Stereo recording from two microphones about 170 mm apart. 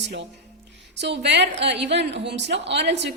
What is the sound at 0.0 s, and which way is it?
A woman's voice, 90° right.